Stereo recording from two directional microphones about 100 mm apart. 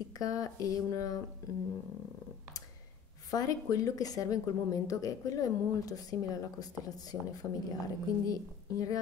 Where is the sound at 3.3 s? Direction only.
35° left (ahead or behind).